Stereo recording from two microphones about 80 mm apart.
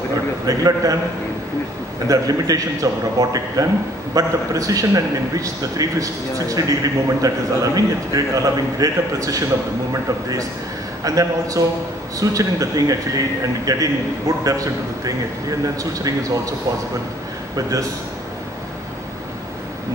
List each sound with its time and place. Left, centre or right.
0.5 s a man's voice: right
2.0 s a man's voice: right
11.1 s a man's voice: right
17.6 s a man's voice: right